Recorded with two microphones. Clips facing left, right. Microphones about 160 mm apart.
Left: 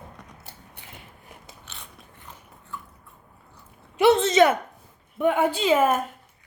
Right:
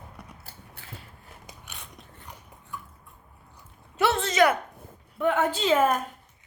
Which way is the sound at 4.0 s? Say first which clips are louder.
Left 5 dB; 20° left (ahead or behind).